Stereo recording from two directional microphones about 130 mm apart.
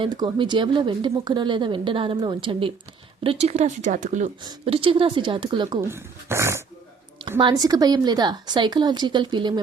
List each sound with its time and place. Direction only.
0.0 s speech: 35° right (ahead or behind)
3.2 s speech: 55° right (ahead or behind); by 4.3 s 70° right (ahead or behind)
4.6 s speech: 45° right (ahead or behind)
5.9 s speech: 20° right (ahead or behind)
7.3 s speech: 40° right (ahead or behind)